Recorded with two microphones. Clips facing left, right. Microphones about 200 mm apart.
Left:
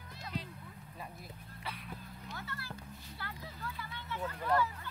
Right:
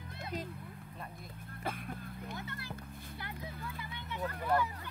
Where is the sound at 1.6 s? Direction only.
50° right (ahead or behind).